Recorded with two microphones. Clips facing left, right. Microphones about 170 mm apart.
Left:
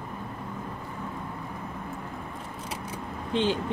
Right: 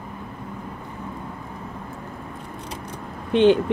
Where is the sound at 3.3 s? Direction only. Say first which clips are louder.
Right 11 dB; 65° right (ahead or behind).